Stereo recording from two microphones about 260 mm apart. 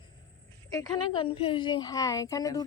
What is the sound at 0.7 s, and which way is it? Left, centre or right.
Speech, centre.